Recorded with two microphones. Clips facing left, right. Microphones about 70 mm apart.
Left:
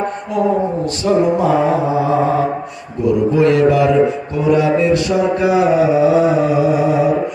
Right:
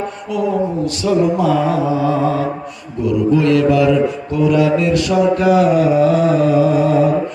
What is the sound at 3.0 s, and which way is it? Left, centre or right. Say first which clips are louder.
Speech: left 1 dB; left.